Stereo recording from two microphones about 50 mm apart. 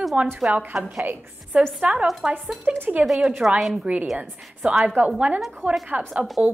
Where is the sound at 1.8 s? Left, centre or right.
Right.